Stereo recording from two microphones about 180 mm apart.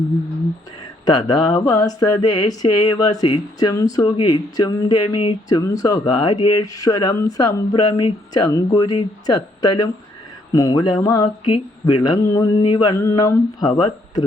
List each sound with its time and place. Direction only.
1.0 s speech: 25° left (ahead or behind)